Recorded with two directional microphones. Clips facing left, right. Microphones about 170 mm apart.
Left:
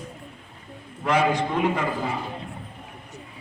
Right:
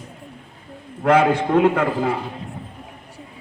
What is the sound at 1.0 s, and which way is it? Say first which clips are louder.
A man's voice: right 6 dB; 60° right (ahead or behind).